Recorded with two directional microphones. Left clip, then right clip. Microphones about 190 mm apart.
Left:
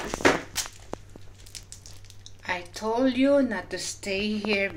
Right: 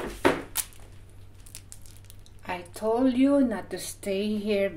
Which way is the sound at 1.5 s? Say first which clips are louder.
Left 5 dB; 50° right (ahead or behind).